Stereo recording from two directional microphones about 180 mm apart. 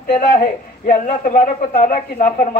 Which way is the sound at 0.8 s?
45° left (ahead or behind).